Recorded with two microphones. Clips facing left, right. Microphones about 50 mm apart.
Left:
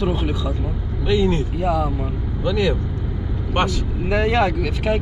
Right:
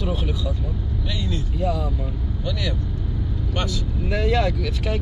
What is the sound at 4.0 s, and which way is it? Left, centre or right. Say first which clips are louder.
Speech: left 4 dB; left.